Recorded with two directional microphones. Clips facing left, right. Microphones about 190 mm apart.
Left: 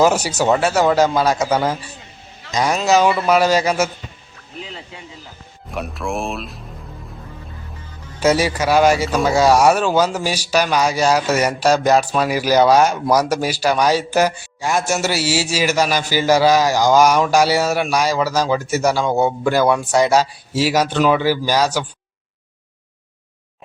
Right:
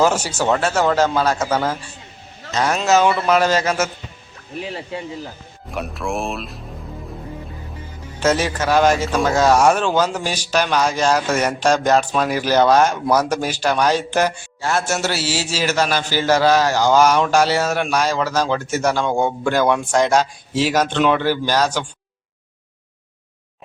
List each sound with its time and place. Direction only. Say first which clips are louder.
0.0 s a man's voice: left 2 dB; 10° left (ahead or behind)
5.7 s speech: even; centre (ahead or behind)
8.2 s a man's voice: left 2 dB; 10° left (ahead or behind)